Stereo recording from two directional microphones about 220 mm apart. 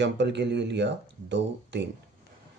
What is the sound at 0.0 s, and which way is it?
Speech, 50° right (ahead or behind).